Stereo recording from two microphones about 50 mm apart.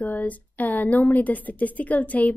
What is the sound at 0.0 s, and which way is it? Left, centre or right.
A woman's voice, left.